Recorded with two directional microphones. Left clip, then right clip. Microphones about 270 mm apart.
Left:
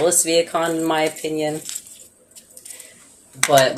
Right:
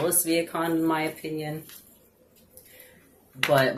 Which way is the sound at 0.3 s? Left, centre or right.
Left.